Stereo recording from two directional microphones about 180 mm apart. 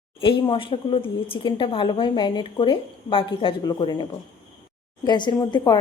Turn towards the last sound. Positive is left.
turn(degrees=25)  # may be behind; listen again after turning